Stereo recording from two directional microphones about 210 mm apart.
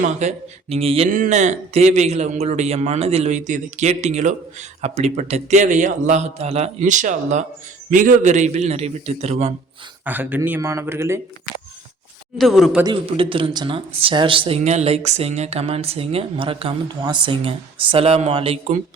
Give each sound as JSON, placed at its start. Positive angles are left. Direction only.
{"t": 0.0, "sound": "a man's voice", "side_deg": -35}
{"t": 10.0, "sound": "speech", "side_deg": -10}
{"t": 12.4, "sound": "speech", "side_deg": 0}
{"t": 12.8, "sound": "speech", "side_deg": -25}